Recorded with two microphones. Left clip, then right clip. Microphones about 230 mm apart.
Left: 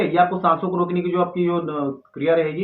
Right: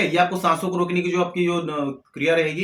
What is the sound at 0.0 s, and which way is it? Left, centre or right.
Speech, right.